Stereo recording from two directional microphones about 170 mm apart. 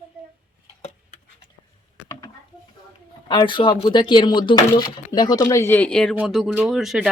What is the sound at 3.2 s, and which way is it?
Speech, 30° left (ahead or behind).